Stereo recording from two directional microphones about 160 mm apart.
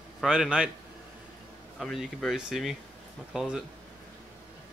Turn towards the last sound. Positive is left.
turn(degrees=-5)  # may be behind; listen again after turning